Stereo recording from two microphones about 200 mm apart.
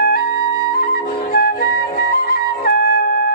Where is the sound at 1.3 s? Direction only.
50° left (ahead or behind).